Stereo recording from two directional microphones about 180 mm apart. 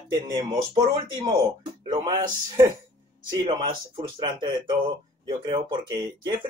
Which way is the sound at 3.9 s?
30° right (ahead or behind).